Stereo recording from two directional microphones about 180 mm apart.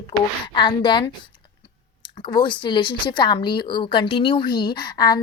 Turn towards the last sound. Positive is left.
turn(degrees=20)  # may be behind; listen again after turning